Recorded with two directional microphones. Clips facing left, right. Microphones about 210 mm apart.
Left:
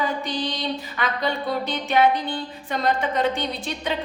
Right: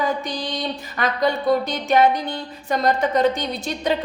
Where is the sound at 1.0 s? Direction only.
45° right (ahead or behind).